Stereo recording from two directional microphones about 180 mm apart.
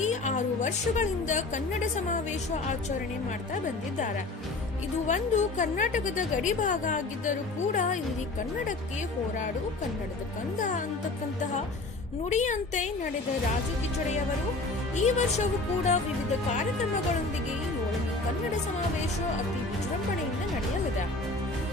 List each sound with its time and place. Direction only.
0.0 s a woman's voice: 40° left (ahead or behind)
5.0 s a woman's voice: 40° left (ahead or behind)
12.3 s a woman's voice: 40° left (ahead or behind)
14.9 s a woman's voice: 40° left (ahead or behind)